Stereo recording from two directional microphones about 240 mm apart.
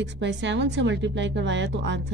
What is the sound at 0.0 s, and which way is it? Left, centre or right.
Speech, right.